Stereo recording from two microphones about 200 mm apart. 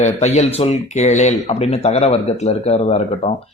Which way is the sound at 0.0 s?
35° left (ahead or behind).